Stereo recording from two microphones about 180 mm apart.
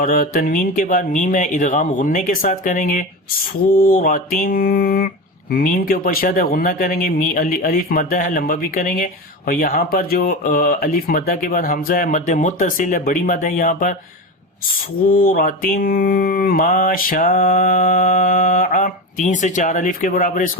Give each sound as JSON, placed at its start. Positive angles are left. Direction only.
{"t": 0.0, "sound": "mantra", "side_deg": 50}
{"t": 15.0, "sound": "mantra", "side_deg": 50}